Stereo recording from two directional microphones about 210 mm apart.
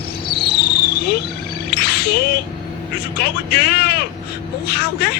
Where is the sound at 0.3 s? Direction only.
50° left (ahead or behind).